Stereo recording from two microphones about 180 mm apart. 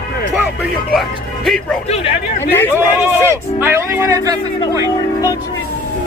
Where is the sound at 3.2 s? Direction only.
15° right (ahead or behind).